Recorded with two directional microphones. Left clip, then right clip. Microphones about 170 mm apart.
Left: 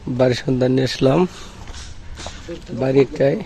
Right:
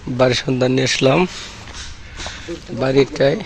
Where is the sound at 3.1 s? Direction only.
25° left (ahead or behind).